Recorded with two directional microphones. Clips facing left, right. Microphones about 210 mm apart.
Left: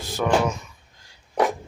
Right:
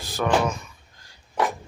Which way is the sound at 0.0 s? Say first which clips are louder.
Left 1 dB; 25° left (ahead or behind).